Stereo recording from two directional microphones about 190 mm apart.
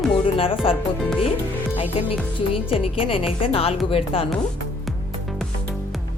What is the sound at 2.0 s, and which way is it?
Speech, 30° left (ahead or behind).